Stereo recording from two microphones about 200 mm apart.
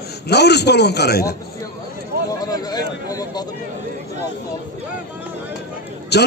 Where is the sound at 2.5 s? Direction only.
20° left (ahead or behind).